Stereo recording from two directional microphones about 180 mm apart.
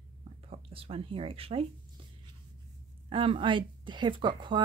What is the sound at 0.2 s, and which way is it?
Speech, 35° right (ahead or behind).